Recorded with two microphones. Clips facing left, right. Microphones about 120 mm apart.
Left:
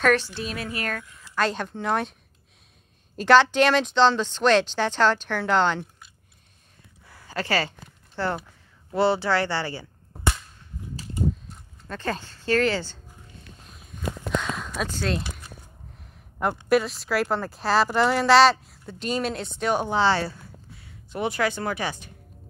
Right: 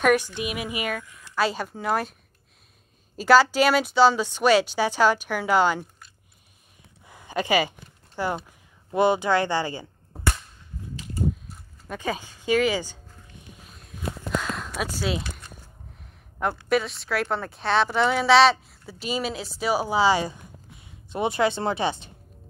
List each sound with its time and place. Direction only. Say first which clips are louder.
0.0 s a woman's voice: right 1 dB; 10° right (ahead or behind)
3.2 s speech: even; 5° right (ahead or behind)
7.1 s a sound: right 3 dB; 20° right (ahead or behind)
8.2 s speech: even; 15° right (ahead or behind)
11.4 s speech: right 1 dB; 10° right (ahead or behind)
13.7 s a sound: left 1 dB; centre (ahead or behind)
16.6 s a woman's voice: left 4 dB; centre (ahead or behind); by 22.1 s 25° right (ahead or behind)